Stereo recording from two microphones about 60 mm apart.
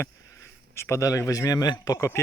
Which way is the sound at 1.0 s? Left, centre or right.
Left.